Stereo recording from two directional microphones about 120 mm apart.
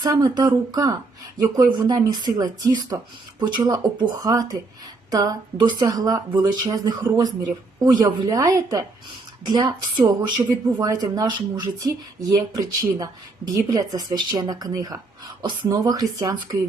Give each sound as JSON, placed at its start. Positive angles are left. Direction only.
{"t": 0.0, "sound": "a woman's voice", "side_deg": -35}
{"t": 9.5, "sound": "a woman's voice", "side_deg": -40}